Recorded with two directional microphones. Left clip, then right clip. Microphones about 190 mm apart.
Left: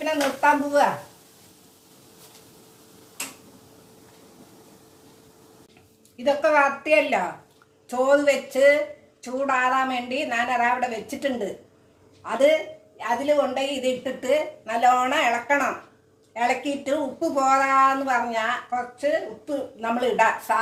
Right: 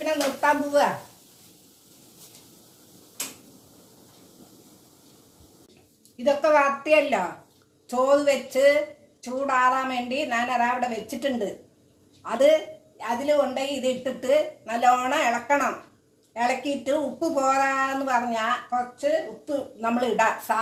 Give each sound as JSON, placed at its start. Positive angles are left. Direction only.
{"t": 0.0, "sound": "a woman's voice", "side_deg": -15}
{"t": 6.2, "sound": "a woman's voice", "side_deg": 0}